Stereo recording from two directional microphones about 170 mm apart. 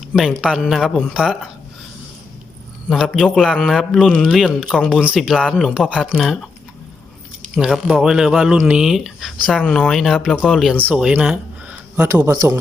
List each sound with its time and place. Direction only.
0.1 s speech: centre (ahead or behind)
2.9 s speech: centre (ahead or behind)
7.5 s speech: centre (ahead or behind)
12.1 s a man's voice: 15° right (ahead or behind)